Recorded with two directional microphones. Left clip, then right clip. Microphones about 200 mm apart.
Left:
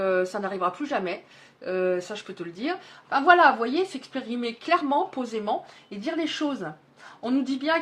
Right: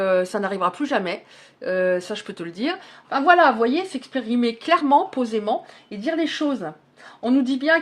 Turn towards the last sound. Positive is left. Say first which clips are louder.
# right 6 dB
turn(degrees=-35)  # may be behind; listen again after turning